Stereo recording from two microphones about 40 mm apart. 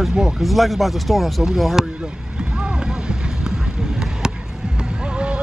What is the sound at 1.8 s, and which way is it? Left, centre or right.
Speech, centre.